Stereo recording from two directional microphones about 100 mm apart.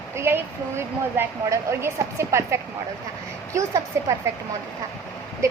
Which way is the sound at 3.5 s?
40° right (ahead or behind).